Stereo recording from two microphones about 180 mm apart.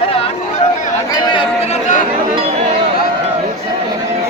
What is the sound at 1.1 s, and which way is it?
Chatter, 25° left (ahead or behind).